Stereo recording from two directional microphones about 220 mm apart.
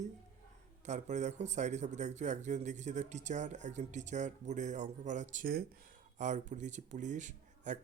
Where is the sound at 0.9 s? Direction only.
30° right (ahead or behind).